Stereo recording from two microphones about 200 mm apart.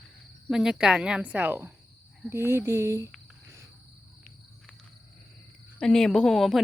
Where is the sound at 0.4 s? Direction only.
5° right (ahead or behind).